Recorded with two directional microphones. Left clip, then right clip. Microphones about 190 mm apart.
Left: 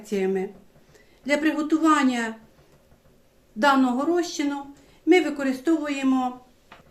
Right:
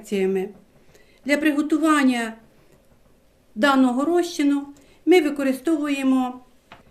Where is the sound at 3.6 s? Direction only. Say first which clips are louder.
Right 1 dB; 40° right (ahead or behind).